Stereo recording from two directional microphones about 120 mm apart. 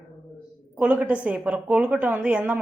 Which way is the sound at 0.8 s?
15° right (ahead or behind).